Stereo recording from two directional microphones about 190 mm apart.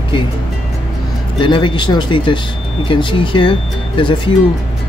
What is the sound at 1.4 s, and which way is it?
Speech, 25° left (ahead or behind).